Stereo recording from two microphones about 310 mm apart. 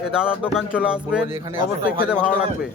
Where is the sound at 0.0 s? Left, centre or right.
Centre.